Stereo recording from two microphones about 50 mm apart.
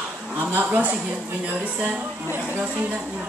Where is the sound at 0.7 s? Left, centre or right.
Right.